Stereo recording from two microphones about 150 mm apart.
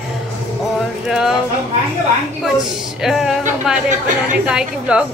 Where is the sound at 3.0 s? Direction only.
Centre (ahead or behind).